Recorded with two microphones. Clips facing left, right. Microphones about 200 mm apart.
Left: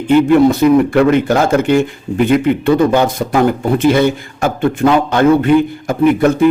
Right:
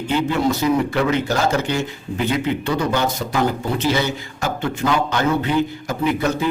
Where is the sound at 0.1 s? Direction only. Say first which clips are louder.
Left 11 dB; 55° left (ahead or behind).